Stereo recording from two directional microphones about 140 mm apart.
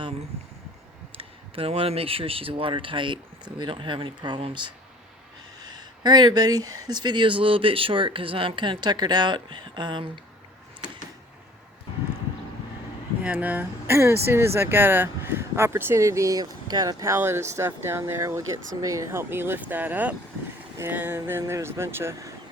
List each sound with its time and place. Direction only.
1.1 s speech: 40° right (ahead or behind)
13.2 s speech: 10° right (ahead or behind)